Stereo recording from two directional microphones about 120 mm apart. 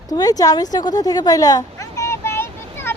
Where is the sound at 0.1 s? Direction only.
30° left (ahead or behind).